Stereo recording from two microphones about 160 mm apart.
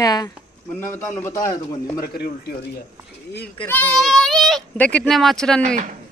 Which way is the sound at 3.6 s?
10° left (ahead or behind).